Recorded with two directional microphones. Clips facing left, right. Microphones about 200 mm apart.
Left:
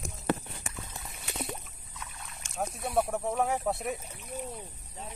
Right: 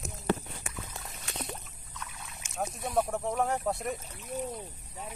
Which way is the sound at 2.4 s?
5° right (ahead or behind).